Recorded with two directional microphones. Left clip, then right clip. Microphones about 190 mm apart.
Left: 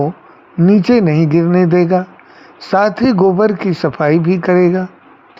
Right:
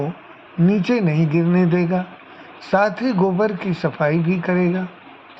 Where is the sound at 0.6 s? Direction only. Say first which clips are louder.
Left 8 dB; 60° left (ahead or behind).